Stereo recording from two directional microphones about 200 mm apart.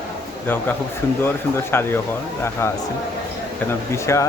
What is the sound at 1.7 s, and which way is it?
Speech, 10° left (ahead or behind).